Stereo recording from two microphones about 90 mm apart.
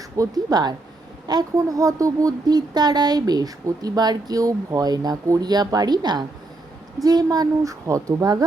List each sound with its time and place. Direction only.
0.2 s speech: 45° right (ahead or behind)